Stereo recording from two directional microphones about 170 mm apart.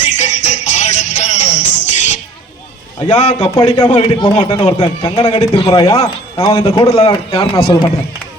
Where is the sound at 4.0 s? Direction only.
25° left (ahead or behind).